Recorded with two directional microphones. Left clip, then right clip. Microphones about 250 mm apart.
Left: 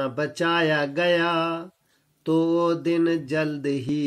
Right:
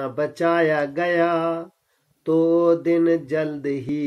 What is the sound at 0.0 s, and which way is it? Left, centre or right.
Speech, left.